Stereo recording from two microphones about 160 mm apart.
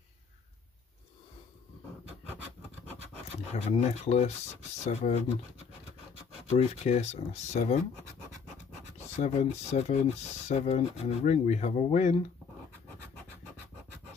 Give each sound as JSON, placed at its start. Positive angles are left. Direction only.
{"t": 3.5, "sound": "speech", "side_deg": 45}
{"t": 6.4, "sound": "speech", "side_deg": 40}
{"t": 9.1, "sound": "speech", "side_deg": 45}